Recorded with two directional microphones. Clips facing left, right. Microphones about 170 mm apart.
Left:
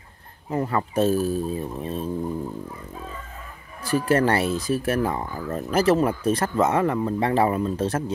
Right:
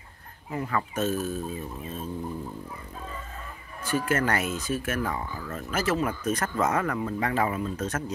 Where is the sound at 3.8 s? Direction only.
35° left (ahead or behind).